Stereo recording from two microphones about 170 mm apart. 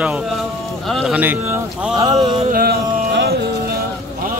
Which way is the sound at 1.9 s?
25° right (ahead or behind).